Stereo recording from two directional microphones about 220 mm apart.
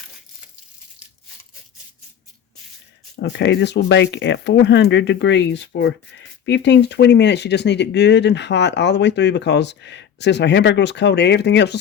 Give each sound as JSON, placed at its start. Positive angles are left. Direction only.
{"t": 3.2, "sound": "speech", "side_deg": 55}